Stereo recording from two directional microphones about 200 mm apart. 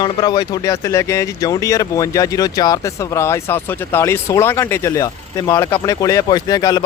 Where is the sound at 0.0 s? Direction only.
20° left (ahead or behind).